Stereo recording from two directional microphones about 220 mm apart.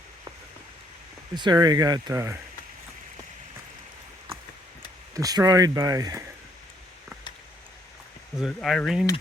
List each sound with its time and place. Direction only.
1.4 s speech: 20° right (ahead or behind)
5.1 s speech: 15° right (ahead or behind)
8.4 s speech: centre (ahead or behind)